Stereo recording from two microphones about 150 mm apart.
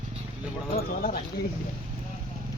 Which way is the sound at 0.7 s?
85° left.